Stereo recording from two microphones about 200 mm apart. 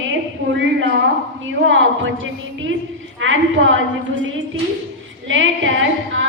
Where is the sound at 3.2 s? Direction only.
70° right (ahead or behind).